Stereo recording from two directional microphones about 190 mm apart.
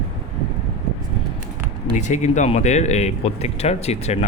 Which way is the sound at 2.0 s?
40° left (ahead or behind).